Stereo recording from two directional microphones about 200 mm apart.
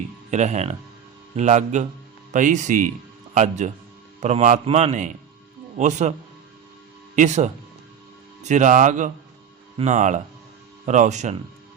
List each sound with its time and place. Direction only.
0.3 s a man's voice: 35° right (ahead or behind)
7.2 s a man's voice: 35° right (ahead or behind)